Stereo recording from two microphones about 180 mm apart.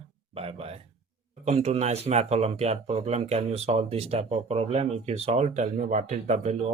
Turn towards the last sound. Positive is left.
turn(degrees=-40)  # may be behind; listen again after turning